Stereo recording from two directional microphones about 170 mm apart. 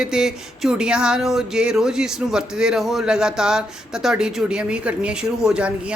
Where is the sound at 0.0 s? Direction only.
5° right (ahead or behind).